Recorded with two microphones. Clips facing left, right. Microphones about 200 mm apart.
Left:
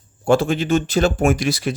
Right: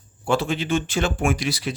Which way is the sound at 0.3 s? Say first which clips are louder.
Left 6 dB; 45° left (ahead or behind).